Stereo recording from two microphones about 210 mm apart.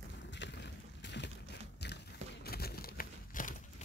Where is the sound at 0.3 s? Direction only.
55° left (ahead or behind).